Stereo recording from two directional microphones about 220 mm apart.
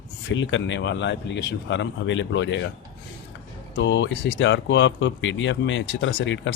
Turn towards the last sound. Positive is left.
turn(degrees=55)  # may be behind; listen again after turning